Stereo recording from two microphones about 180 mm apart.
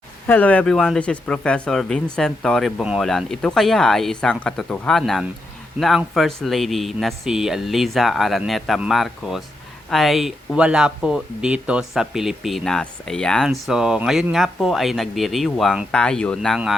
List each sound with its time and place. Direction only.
0.3 s speech: 10° left (ahead or behind)